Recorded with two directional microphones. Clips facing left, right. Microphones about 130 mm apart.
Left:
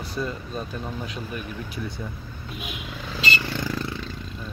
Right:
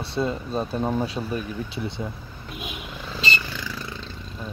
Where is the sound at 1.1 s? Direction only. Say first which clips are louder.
Right 5 dB; 30° right (ahead or behind).